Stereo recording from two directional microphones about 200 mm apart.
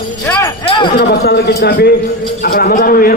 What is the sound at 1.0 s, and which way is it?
A man's voice, 55° left (ahead or behind).